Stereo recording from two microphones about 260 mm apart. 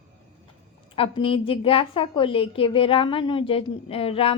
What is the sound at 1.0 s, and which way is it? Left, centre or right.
A woman's voice, centre.